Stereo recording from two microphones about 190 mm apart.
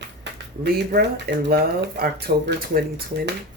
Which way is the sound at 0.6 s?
55° right (ahead or behind).